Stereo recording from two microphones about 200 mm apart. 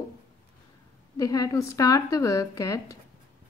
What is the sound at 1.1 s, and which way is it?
A woman's voice, 15° left (ahead or behind).